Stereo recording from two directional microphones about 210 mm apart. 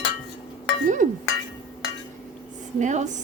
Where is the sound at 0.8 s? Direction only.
35° right (ahead or behind).